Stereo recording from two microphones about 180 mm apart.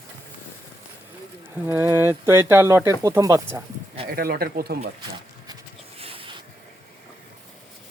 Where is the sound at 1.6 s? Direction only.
15° right (ahead or behind).